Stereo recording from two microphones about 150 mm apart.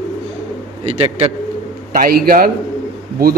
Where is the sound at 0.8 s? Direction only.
40° right (ahead or behind).